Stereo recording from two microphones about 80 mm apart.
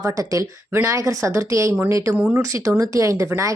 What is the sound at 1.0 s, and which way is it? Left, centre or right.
Speech, right.